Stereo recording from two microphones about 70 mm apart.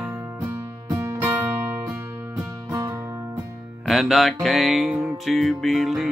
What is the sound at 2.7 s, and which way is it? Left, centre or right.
Music, right.